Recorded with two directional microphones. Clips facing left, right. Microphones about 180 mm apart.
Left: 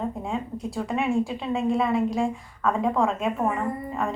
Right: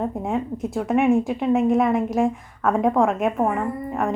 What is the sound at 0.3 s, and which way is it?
A woman's voice, 20° right (ahead or behind).